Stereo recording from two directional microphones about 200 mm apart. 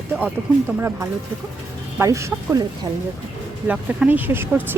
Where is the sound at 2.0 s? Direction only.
15° right (ahead or behind).